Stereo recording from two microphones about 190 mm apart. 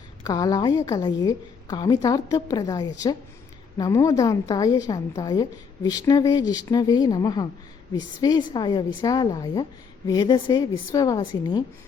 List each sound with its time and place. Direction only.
0.3 s a woman's voice: 20° left (ahead or behind)